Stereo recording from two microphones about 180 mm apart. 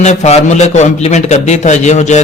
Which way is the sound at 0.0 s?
40° left (ahead or behind).